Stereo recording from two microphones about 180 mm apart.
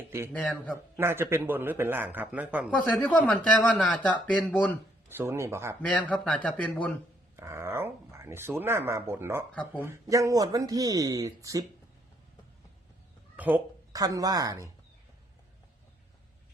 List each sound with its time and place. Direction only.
0.3 s speech: 5° left (ahead or behind)
0.9 s speech: 15° right (ahead or behind)
2.6 s speech: 5° left (ahead or behind)
4.5 s a sound: 10° left (ahead or behind)
5.1 s speech: 15° right (ahead or behind)
5.9 s speech: 5° left (ahead or behind)
7.3 s speech: 15° right (ahead or behind)
13.3 s cat: 10° right (ahead or behind)
13.9 s speech: 20° right (ahead or behind)